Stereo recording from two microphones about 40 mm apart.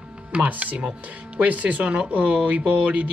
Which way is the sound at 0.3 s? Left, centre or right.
Right.